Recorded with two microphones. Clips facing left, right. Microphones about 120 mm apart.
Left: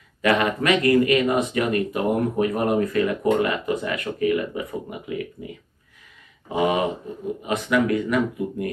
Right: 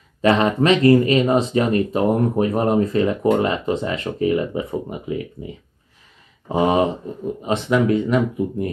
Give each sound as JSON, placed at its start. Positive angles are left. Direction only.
{"t": 0.2, "sound": "speech", "side_deg": -30}
{"t": 6.5, "sound": "speech", "side_deg": -35}